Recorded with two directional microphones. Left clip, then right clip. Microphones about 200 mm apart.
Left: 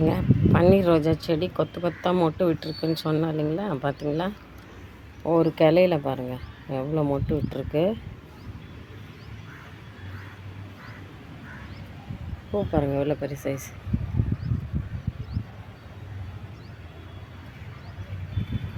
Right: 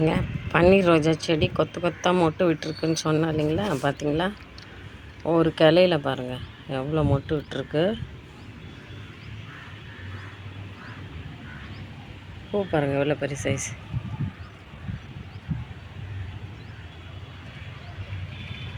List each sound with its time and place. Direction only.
0.0 s speech: centre (ahead or behind)
12.5 s speech: centre (ahead or behind)